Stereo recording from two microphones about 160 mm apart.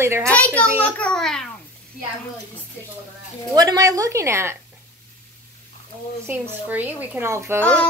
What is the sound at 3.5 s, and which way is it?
A woman's voice, 25° right (ahead or behind).